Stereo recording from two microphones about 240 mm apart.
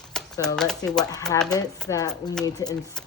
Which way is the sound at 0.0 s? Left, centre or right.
Centre.